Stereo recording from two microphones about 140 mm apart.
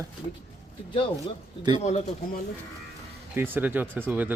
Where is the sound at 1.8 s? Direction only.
55° left (ahead or behind).